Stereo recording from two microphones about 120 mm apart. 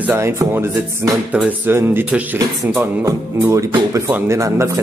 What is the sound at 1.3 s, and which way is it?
Speech, 15° right (ahead or behind).